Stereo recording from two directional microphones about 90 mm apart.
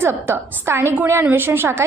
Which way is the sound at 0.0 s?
25° right (ahead or behind).